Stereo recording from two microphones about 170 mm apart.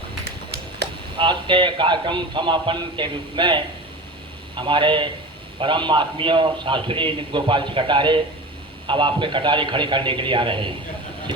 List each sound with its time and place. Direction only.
1.1 s a man's voice: 30° right (ahead or behind)